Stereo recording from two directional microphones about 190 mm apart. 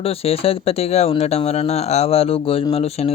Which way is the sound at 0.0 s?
30° left (ahead or behind).